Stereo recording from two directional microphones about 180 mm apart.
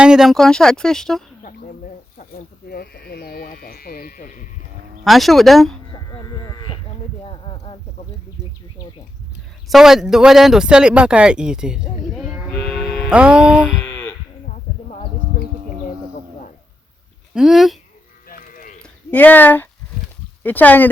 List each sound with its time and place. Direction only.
0.0 s speech: 5° right (ahead or behind)
2.1 s speech: 55° left (ahead or behind)
5.0 s speech: centre (ahead or behind)
5.9 s sheep: 25° left (ahead or behind)
7.3 s a sound: 25° left (ahead or behind)
9.6 s speech: centre (ahead or behind)
12.7 s music: centre (ahead or behind)
13.7 s a sound: 15° left (ahead or behind)
17.3 s speech: centre (ahead or behind)
18.3 s sheep: 50° left (ahead or behind)
18.8 s a sound: 10° left (ahead or behind)
20.4 s speech: 10° left (ahead or behind)